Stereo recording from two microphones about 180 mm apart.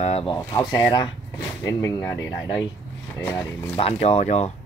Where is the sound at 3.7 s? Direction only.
35° left (ahead or behind).